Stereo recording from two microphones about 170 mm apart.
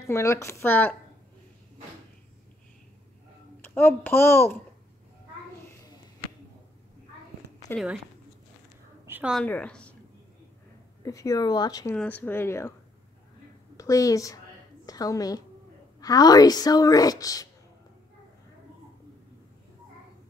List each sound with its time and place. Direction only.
0.0 s a woman's voice: 15° left (ahead or behind)
3.6 s a woman's voice: 10° left (ahead or behind)
7.7 s speech: 5° right (ahead or behind)
9.0 s a sound: 10° right (ahead or behind)
9.3 s a woman's voice: 5° left (ahead or behind)
11.0 s a woman's voice: 20° left (ahead or behind)
11.9 s a woman's voice: 10° left (ahead or behind)
13.7 s a woman's voice: 20° left (ahead or behind)